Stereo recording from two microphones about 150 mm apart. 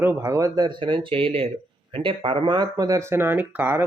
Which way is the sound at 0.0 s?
20° right (ahead or behind).